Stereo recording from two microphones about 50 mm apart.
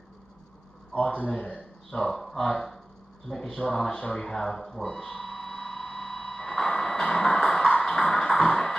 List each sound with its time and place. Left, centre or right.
0.9 s a man's voice: left
1.9 s speech: centre
3.3 s a sound: centre
7.8 s music: centre